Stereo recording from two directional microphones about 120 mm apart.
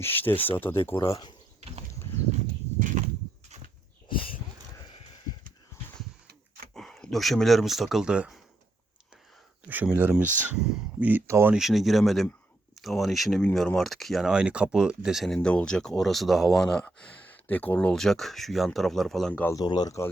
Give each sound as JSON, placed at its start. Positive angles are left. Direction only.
{"t": 0.0, "sound": "speech", "side_deg": 15}
{"t": 6.7, "sound": "speech", "side_deg": 5}
{"t": 9.6, "sound": "speech", "side_deg": -15}
{"t": 11.1, "sound": "speech", "side_deg": -20}
{"t": 11.5, "sound": "speech", "side_deg": 0}
{"t": 19.3, "sound": "speech", "side_deg": 15}
{"t": 19.5, "sound": "speech", "side_deg": 35}